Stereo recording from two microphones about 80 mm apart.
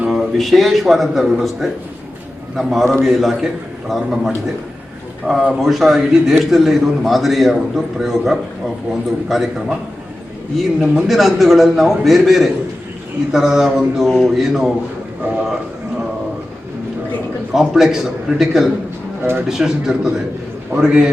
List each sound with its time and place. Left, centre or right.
0.1 s a man's voice: centre
17.5 s a man's voice: centre